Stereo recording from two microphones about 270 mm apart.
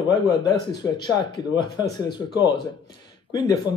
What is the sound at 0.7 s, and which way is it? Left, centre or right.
Speech, centre.